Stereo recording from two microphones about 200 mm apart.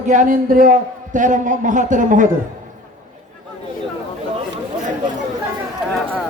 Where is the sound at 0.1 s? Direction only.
40° right (ahead or behind).